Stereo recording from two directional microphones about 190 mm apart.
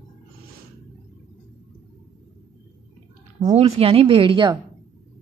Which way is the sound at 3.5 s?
30° right (ahead or behind).